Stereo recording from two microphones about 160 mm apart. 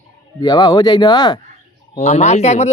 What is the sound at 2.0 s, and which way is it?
Speech, 45° left (ahead or behind).